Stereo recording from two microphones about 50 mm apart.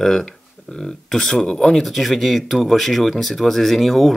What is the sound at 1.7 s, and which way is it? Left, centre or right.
Speech, centre.